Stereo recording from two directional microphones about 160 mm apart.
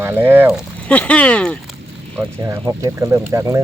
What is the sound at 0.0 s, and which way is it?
Speech, 15° right (ahead or behind).